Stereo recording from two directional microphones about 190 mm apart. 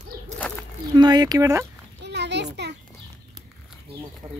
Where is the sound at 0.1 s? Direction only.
15° right (ahead or behind).